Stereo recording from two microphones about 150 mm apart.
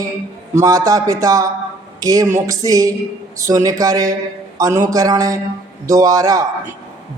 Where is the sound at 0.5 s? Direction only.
25° right (ahead or behind).